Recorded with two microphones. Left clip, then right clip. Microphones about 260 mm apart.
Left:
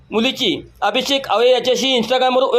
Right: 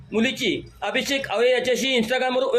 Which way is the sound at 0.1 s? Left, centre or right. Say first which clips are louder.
Left 5 dB; centre.